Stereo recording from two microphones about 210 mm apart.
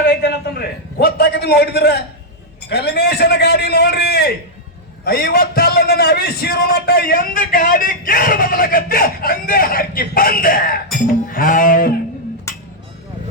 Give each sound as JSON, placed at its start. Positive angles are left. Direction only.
{"t": 0.0, "sound": "a sound", "side_deg": 50}
{"t": 2.6, "sound": "a man's voice", "side_deg": 50}
{"t": 10.9, "sound": "music", "side_deg": 40}